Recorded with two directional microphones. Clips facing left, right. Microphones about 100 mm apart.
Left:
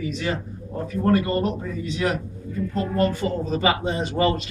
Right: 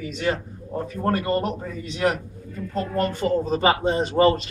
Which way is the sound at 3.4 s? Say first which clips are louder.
Even; 35° right (ahead or behind).